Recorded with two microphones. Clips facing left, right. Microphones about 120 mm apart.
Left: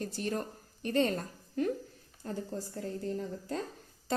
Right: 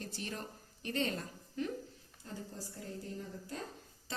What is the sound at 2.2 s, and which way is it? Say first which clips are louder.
Speech: left 9 dB; 60° left (ahead or behind).